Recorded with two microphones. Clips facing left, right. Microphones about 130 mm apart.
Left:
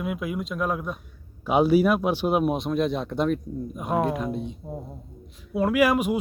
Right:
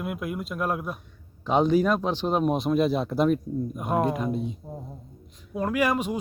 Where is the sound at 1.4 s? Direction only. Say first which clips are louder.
Left 2 dB; 10° left (ahead or behind).